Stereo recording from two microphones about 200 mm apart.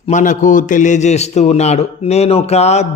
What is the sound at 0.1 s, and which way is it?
A man's voice, 40° left (ahead or behind).